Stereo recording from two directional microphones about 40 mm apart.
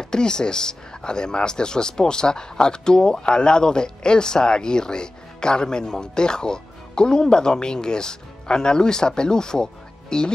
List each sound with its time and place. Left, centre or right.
0.0 s speech: centre